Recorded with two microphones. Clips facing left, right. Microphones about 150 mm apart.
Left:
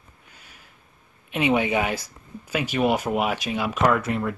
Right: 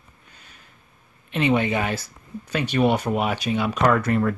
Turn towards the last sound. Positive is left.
turn(degrees=5)  # may be behind; listen again after turning